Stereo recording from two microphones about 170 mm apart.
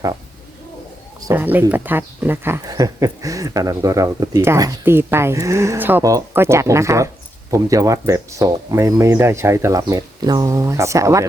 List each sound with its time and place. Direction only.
1.3 s speech: 10° right (ahead or behind)